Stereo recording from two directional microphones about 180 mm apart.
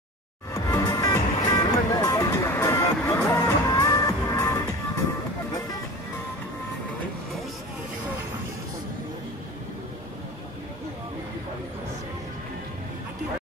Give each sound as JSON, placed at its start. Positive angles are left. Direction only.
{"t": 0.7, "sound": "music", "side_deg": 20}